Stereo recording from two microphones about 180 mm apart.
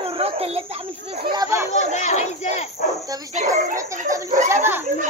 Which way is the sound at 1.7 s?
40° left (ahead or behind).